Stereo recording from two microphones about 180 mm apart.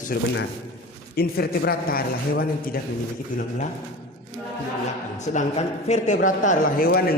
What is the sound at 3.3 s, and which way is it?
Speech, 50° left (ahead or behind).